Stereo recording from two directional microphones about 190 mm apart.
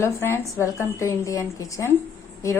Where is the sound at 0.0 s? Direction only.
15° left (ahead or behind).